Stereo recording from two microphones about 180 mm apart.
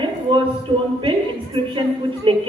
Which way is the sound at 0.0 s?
25° right (ahead or behind).